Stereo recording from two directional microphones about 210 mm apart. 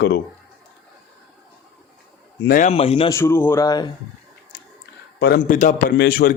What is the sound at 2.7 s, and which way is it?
Speech, 25° left (ahead or behind).